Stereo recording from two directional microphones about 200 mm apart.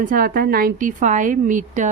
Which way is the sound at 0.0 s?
45° right (ahead or behind).